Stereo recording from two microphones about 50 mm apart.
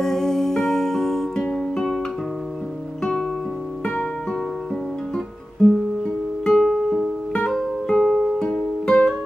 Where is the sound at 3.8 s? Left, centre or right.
Centre.